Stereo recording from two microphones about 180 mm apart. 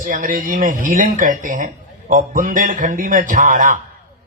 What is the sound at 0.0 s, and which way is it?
Speech, 50° right (ahead or behind).